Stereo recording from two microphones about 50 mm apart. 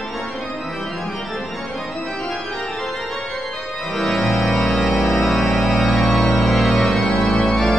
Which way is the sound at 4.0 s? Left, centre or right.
Centre.